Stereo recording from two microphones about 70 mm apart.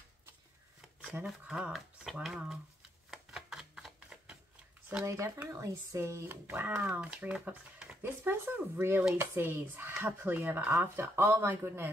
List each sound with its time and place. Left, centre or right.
1.2 s speech: centre
3.1 s shuffling cards: centre
5.0 s speech: right
6.2 s speech: right
6.9 s speech: centre
8.0 s speech: right